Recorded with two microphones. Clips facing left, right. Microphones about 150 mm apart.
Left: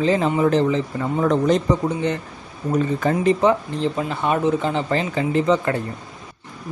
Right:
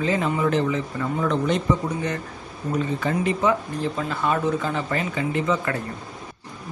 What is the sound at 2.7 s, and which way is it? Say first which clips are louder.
A man's voice: left 4 dB; 40° left (ahead or behind).